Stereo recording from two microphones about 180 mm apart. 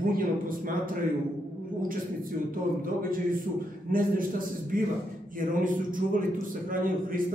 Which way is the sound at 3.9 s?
50° right (ahead or behind).